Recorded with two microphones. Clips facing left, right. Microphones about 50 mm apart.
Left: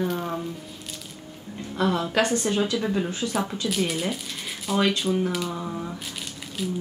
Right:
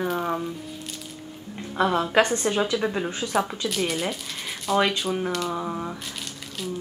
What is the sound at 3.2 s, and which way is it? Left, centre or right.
Speech, centre.